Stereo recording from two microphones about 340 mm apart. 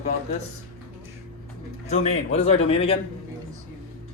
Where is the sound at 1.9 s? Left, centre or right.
Centre.